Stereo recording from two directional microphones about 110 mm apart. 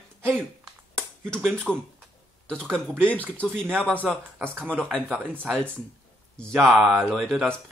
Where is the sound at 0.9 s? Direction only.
10° left (ahead or behind).